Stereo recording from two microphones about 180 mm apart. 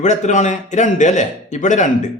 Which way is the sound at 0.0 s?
40° left (ahead or behind).